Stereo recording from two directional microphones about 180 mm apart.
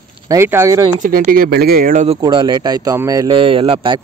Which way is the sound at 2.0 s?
30° right (ahead or behind).